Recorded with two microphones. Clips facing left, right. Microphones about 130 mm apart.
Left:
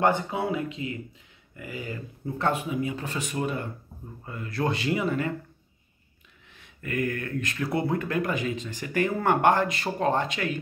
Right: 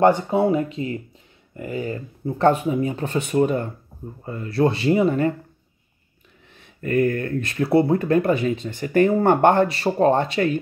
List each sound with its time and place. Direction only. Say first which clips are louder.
0.1 s speech: right 8 dB; 40° right (ahead or behind)
6.8 s speech: right 9 dB; 40° right (ahead or behind)
8.5 s speech: right 4 dB; 40° left (ahead or behind)
8.8 s speech: right 8 dB; 35° right (ahead or behind)